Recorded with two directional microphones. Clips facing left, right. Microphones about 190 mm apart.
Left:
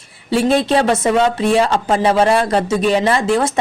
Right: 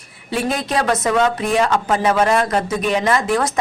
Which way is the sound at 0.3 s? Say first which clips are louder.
Left 7 dB; 30° left (ahead or behind).